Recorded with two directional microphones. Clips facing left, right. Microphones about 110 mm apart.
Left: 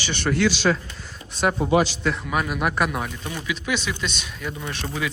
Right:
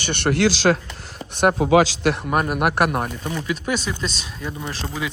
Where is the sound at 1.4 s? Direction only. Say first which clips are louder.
Right 4 dB; 65° right (ahead or behind); by 2.2 s 80° right.